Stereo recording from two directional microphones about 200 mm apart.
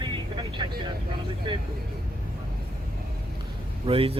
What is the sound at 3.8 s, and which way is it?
Speech, 30° right (ahead or behind).